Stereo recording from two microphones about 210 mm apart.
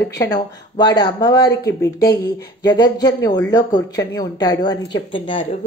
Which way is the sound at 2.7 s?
20° left (ahead or behind).